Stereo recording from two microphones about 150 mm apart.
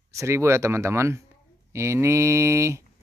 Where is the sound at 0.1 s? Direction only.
20° right (ahead or behind).